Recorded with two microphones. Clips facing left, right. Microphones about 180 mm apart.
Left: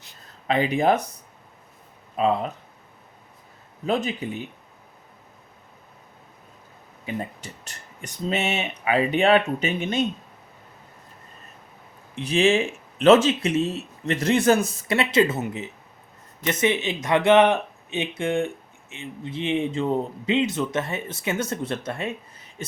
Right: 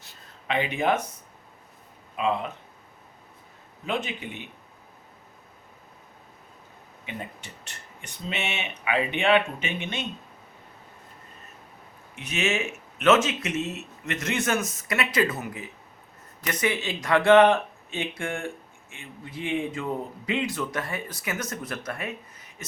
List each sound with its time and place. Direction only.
0.4 s speech: 35° left (ahead or behind)
2.1 s speech: 40° left (ahead or behind)
3.8 s speech: 40° left (ahead or behind)
7.0 s speech: 40° left (ahead or behind)
12.1 s speech: 30° left (ahead or behind)